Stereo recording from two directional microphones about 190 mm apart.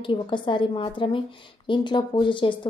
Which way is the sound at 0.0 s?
25° left (ahead or behind).